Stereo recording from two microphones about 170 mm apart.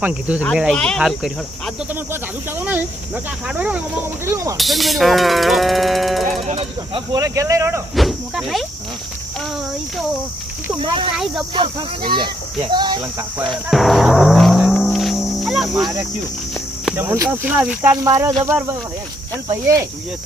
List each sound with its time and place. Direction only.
0.0 s speech: 5° right (ahead or behind)
3.2 s speech: 10° right (ahead or behind)
4.5 s speech: centre (ahead or behind)
6.2 s speech: 40° right (ahead or behind)
6.9 s speech: 25° right (ahead or behind)
7.9 s speech: centre (ahead or behind)
10.8 s speech: 30° right (ahead or behind)
13.7 s music: centre (ahead or behind)
16.8 s speech: 10° right (ahead or behind)
19.5 s speech: 20° right (ahead or behind)